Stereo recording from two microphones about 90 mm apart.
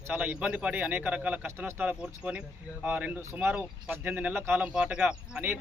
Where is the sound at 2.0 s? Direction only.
10° right (ahead or behind).